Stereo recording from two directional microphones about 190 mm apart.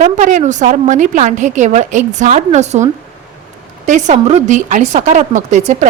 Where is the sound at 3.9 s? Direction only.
40° right (ahead or behind).